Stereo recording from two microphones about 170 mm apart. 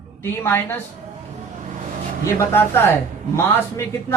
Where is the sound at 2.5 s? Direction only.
15° left (ahead or behind).